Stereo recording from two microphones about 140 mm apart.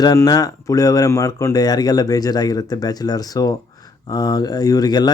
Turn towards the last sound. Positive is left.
turn(degrees=30)  # may be behind; listen again after turning